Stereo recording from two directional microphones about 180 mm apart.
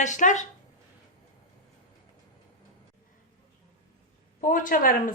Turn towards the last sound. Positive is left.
turn(degrees=50)  # may be behind; listen again after turning